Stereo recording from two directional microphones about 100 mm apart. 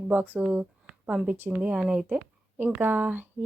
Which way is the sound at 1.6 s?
10° right (ahead or behind).